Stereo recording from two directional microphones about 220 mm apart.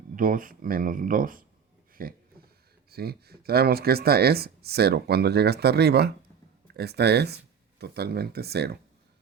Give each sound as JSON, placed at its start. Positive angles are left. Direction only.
{"t": 0.2, "sound": "speech", "side_deg": -40}